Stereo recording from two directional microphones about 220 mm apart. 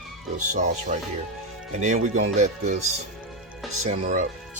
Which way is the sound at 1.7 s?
30° right (ahead or behind).